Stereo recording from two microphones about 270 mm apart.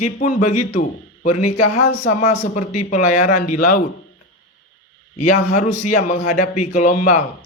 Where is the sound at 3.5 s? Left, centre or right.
Left.